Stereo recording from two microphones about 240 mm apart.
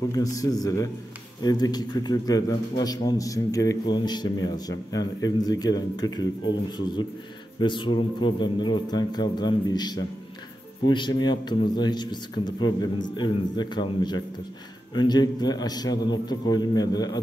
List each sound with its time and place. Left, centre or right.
0.1 s a man's voice: centre